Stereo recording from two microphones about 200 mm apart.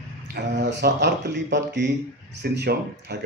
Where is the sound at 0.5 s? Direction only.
60° right (ahead or behind).